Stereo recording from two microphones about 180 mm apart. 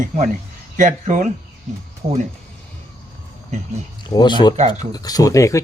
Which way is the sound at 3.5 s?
40° right (ahead or behind).